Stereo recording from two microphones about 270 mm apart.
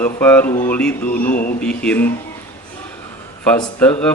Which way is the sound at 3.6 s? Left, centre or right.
Centre.